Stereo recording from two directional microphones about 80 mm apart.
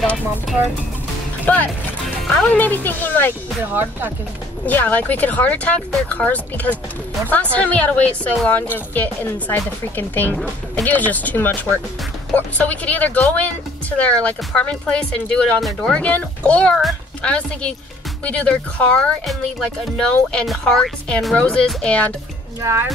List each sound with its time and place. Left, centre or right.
1.4 s speech: left
3.6 s speech: right
4.6 s a woman's voice: left
19.2 s music: centre
20.1 s a woman's voice: centre
20.6 s music: centre
21.4 s a woman's voice: centre
22.6 s speech: right